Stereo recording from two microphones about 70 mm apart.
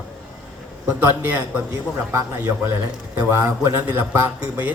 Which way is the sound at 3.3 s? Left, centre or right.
Right.